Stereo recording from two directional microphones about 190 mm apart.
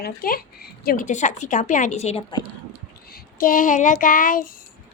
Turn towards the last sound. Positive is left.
turn(degrees=45)  # may be behind; listen again after turning